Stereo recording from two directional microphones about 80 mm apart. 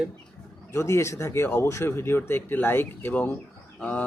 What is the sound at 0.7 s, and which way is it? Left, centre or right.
A man's voice, left.